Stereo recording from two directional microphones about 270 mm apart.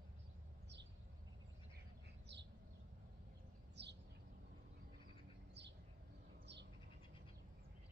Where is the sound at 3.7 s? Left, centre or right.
Right.